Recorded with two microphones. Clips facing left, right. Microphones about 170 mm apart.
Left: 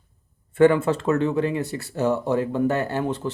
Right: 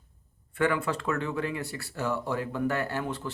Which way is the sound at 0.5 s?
25° left (ahead or behind).